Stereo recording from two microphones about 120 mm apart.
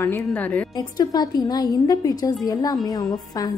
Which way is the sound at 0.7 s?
35° left (ahead or behind).